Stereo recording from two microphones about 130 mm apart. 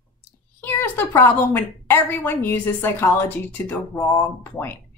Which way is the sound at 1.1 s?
15° left (ahead or behind).